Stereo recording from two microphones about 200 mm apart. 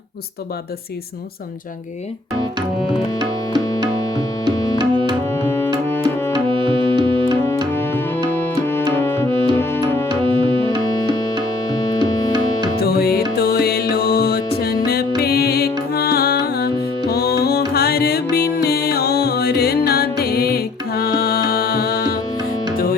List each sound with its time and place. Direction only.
4.8 s tabla: 20° right (ahead or behind)
5.3 s tabla: 10° left (ahead or behind)
5.9 s music: 10° left (ahead or behind)
6.3 s music: 25° right (ahead or behind)
7.7 s music: 10° left (ahead or behind)
9.3 s music: 25° right (ahead or behind)
9.6 s music: 10° left (ahead or behind)
10.1 s music: 25° right (ahead or behind)
12.3 s music: 20° right (ahead or behind)
12.8 s music: 50° left (ahead or behind)